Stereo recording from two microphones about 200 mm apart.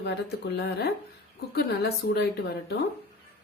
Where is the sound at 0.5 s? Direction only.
60° left (ahead or behind).